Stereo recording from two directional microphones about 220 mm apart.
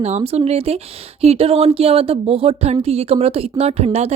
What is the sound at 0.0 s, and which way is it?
Speech, 30° right (ahead or behind).